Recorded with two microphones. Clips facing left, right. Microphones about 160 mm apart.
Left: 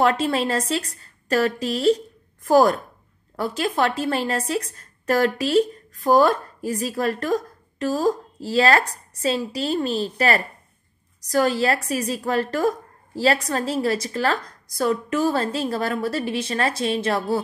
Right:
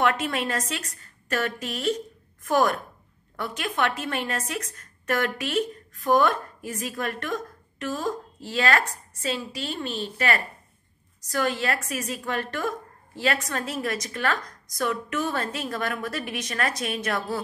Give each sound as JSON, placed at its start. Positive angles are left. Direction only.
{"t": 0.0, "sound": "a woman's voice", "side_deg": 30}